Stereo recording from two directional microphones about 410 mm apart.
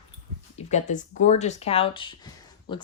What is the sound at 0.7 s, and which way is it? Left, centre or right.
A woman's voice, centre.